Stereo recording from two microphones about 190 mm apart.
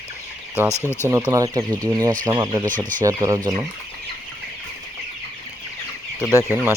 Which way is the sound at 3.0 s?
15° right (ahead or behind).